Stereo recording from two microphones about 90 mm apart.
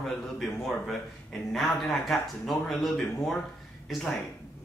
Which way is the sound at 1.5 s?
Centre (ahead or behind).